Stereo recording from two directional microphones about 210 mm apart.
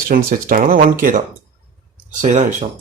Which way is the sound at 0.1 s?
45° right (ahead or behind).